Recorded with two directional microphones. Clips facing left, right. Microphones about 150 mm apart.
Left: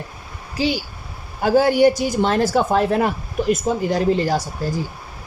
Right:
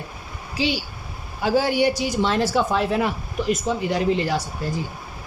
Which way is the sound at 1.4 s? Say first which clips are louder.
Left 5 dB; 50° left (ahead or behind).